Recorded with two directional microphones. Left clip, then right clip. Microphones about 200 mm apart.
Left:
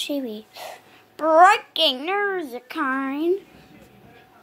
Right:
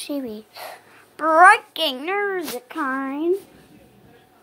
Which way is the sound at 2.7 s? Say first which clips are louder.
Left 1 dB; 30° left (ahead or behind).